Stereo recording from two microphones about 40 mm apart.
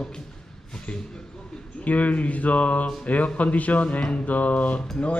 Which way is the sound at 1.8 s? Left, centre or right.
Left.